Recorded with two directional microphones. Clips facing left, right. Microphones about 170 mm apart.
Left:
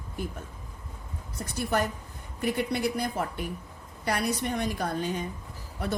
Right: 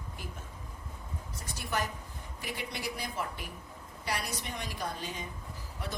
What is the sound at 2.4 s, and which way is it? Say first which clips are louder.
A woman's voice: left 11 dB; 55° left (ahead or behind).